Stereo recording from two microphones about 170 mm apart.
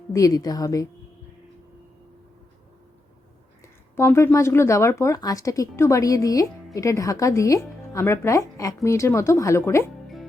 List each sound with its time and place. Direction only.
0.1 s a woman's voice: 20° left (ahead or behind)
3.9 s speech: 15° left (ahead or behind)